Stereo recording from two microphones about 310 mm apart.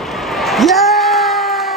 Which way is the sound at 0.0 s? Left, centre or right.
Centre.